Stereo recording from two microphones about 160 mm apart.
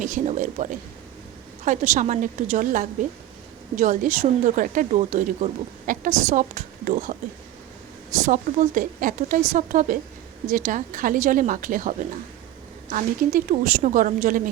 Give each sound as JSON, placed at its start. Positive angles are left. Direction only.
{"t": 0.0, "sound": "a woman's voice", "side_deg": -55}
{"t": 8.2, "sound": "a woman's voice", "side_deg": -55}